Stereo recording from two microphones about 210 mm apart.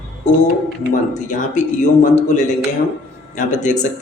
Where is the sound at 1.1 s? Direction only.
35° left (ahead or behind).